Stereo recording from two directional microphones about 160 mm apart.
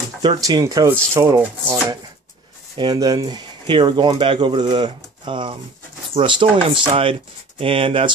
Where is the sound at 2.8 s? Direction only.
25° right (ahead or behind).